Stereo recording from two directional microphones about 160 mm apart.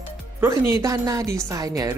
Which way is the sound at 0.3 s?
15° right (ahead or behind).